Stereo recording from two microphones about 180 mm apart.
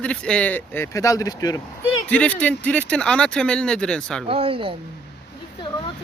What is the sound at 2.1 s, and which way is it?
Speech, 5° left (ahead or behind).